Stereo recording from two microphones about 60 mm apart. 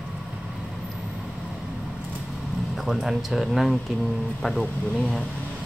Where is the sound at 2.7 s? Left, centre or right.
Centre.